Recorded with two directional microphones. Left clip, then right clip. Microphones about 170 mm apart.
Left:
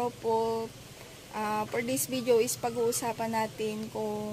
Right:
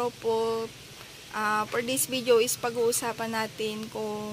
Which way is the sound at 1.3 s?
5° left (ahead or behind).